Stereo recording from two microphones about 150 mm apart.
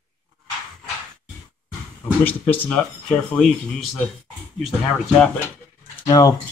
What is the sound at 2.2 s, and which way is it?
Speech, 10° left (ahead or behind).